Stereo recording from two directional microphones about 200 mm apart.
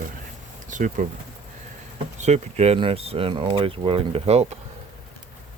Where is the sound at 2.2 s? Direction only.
35° right (ahead or behind).